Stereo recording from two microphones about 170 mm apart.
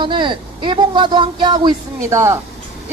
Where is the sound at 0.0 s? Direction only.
30° right (ahead or behind).